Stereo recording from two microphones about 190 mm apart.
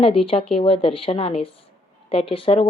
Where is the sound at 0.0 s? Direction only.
30° left (ahead or behind).